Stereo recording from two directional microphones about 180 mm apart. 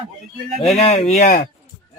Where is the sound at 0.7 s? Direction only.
35° left (ahead or behind).